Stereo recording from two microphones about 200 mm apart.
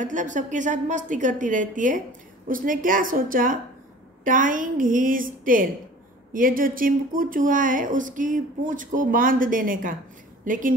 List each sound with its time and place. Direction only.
0.0 s a woman's voice: 40° right (ahead or behind)